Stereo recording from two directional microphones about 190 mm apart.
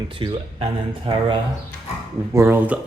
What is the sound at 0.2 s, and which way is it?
Speech, 25° right (ahead or behind).